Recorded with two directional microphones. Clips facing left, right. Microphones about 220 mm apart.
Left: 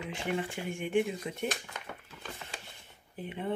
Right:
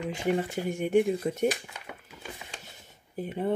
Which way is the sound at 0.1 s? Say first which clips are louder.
Right 6 dB; 40° right (ahead or behind).